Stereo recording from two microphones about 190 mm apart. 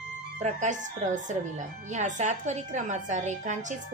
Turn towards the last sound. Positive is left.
turn(degrees=-40)  # may be behind; listen again after turning